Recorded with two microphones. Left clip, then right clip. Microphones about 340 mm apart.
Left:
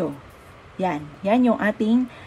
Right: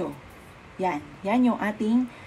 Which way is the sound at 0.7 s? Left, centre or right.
Left.